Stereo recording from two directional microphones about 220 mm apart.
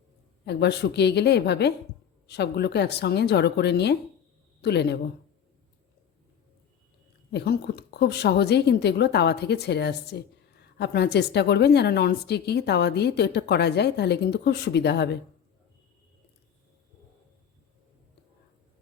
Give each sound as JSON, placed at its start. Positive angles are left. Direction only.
{"t": 0.4, "sound": "a woman's voice", "side_deg": 50}
{"t": 7.3, "sound": "a woman's voice", "side_deg": 50}